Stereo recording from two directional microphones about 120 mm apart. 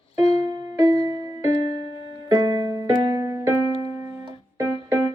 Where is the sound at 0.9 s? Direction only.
50° left (ahead or behind).